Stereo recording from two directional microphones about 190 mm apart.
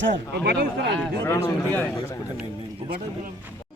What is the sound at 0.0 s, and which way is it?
Speech, 70° right (ahead or behind).